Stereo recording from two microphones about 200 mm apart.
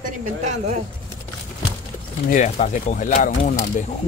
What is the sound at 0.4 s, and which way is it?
Speech, 35° right (ahead or behind).